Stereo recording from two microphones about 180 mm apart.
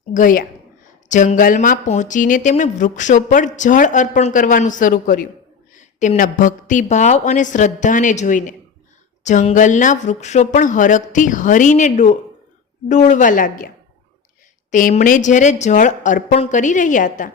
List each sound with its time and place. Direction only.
0.1 s a woman's voice: 50° left (ahead or behind)
14.7 s speech: 45° left (ahead or behind)